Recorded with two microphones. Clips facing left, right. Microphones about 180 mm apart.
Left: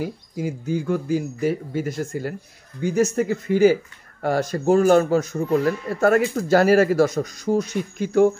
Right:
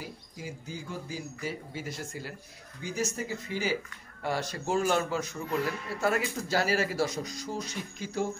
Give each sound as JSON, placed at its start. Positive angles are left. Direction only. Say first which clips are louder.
{"t": 0.0, "sound": "speech", "louder": "left 14 dB", "side_deg": 60}